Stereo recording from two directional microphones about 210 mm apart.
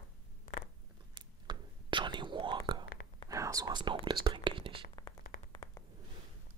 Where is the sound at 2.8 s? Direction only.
50° left (ahead or behind).